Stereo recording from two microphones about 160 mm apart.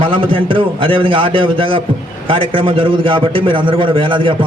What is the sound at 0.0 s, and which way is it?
A man's voice, 35° right (ahead or behind).